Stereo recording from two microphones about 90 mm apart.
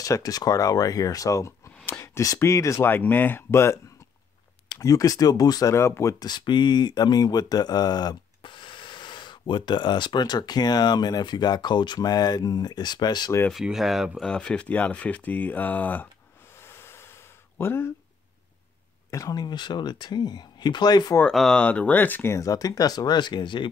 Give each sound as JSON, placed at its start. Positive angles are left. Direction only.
{"t": 0.0, "sound": "speech", "side_deg": 40}
{"t": 2.9, "sound": "speech", "side_deg": 20}
{"t": 4.7, "sound": "speech", "side_deg": 40}
{"t": 5.8, "sound": "speech", "side_deg": 30}
{"t": 6.2, "sound": "speech", "side_deg": 55}
{"t": 13.5, "sound": "speech", "side_deg": -5}
{"t": 14.2, "sound": "speech", "side_deg": 10}
{"t": 16.6, "sound": "ocean", "side_deg": 30}
{"t": 17.6, "sound": "speech", "side_deg": 25}
{"t": 19.0, "sound": "speech", "side_deg": 35}
{"t": 19.3, "sound": "speech", "side_deg": 55}
{"t": 21.3, "sound": "speech", "side_deg": 5}
{"t": 22.4, "sound": "speech", "side_deg": 40}